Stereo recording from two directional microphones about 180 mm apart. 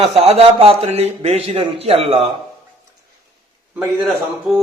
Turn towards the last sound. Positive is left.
turn(degrees=-5)  # may be behind; listen again after turning